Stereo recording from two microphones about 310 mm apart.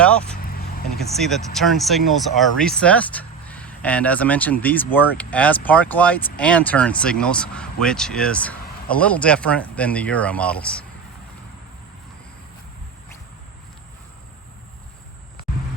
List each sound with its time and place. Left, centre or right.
0.0 s vehicle: centre
0.4 s vehicle: left
0.9 s speech: centre